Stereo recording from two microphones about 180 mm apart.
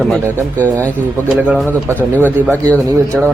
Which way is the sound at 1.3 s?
5° right (ahead or behind).